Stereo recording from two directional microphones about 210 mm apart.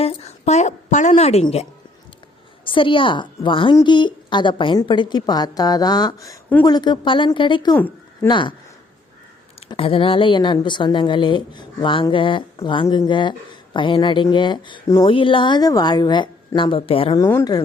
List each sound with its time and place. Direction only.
0.0 s a woman's voice: 30° left (ahead or behind)
2.6 s a woman's voice: 25° left (ahead or behind)
7.8 s a sound: 10° left (ahead or behind)
8.3 s a woman's voice: 20° left (ahead or behind)
9.6 s a woman's voice: 25° left (ahead or behind)
17.2 s speech: 15° left (ahead or behind)